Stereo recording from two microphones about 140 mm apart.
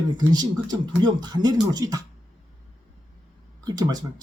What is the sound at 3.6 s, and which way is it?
Speech, 30° right (ahead or behind).